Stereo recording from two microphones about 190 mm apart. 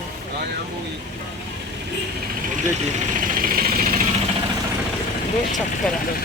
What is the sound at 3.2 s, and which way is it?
Vehicle, 45° right (ahead or behind).